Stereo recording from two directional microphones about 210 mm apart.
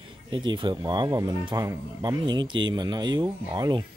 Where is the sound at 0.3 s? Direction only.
20° right (ahead or behind).